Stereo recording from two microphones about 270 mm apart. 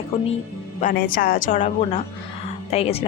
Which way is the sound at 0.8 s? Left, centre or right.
Left.